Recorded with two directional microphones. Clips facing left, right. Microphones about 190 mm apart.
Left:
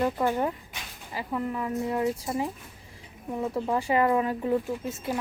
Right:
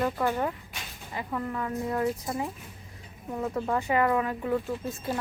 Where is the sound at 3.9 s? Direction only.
25° left (ahead or behind).